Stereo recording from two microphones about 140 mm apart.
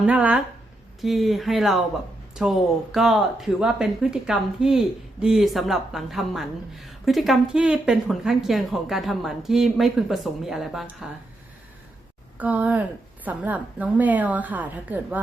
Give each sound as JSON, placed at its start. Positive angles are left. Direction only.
{"t": 0.0, "sound": "a woman's voice", "side_deg": -10}
{"t": 12.4, "sound": "a woman's voice", "side_deg": -10}